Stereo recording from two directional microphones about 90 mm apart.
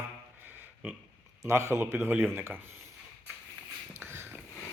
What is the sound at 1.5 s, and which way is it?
A man's voice, 30° right (ahead or behind).